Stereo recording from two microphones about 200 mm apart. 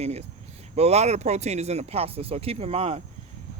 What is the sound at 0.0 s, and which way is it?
Speech, 30° right (ahead or behind).